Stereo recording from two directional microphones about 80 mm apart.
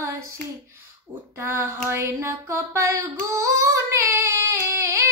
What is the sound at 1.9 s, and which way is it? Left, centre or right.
Female singing, right.